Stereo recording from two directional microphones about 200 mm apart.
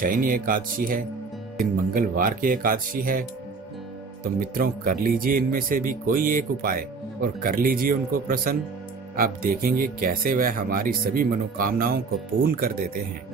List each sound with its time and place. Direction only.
0.0 s speech: 45° right (ahead or behind)